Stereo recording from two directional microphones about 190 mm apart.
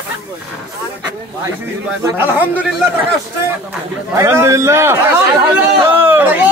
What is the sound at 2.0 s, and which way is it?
Speech, 10° right (ahead or behind).